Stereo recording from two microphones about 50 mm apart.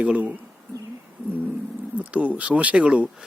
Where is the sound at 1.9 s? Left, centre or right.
Right.